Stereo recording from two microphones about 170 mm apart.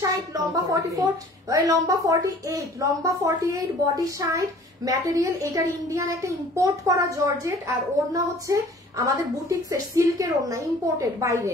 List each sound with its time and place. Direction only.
0.0 s a woman's voice: 20° right (ahead or behind)